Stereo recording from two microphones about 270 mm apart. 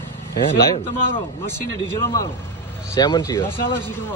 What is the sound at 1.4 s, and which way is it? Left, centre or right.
A man's voice, centre.